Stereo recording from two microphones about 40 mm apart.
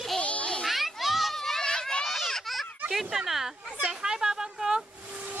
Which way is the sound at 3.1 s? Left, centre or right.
Centre.